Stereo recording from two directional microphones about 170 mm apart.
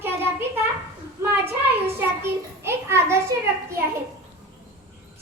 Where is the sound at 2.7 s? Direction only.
15° right (ahead or behind).